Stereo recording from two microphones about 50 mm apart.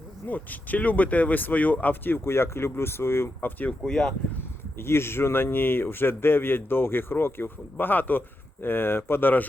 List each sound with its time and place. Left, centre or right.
0.3 s speech: left
3.7 s speech: centre
4.8 s speech: left